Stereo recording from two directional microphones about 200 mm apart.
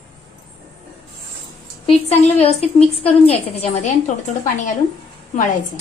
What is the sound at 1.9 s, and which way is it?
A woman's voice, 30° left (ahead or behind).